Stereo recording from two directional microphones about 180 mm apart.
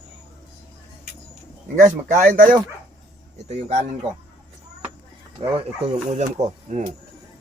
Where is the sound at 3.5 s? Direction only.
40° right (ahead or behind).